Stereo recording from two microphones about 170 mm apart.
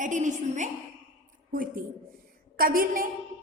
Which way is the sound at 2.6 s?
55° right (ahead or behind).